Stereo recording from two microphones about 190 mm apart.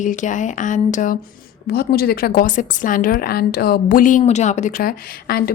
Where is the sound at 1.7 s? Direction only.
55° left (ahead or behind).